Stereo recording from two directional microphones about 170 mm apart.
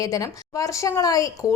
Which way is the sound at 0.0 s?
20° left (ahead or behind).